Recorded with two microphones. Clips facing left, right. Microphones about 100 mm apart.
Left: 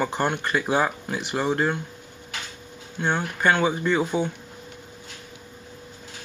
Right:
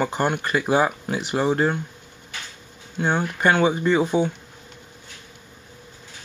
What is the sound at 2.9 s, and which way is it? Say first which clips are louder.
Speech: right 2 dB; 10° right (ahead or behind).